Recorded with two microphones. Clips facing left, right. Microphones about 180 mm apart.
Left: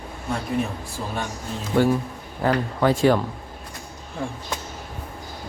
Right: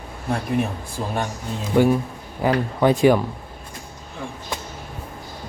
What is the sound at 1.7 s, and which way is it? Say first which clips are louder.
Speech: right 2 dB; 15° right (ahead or behind).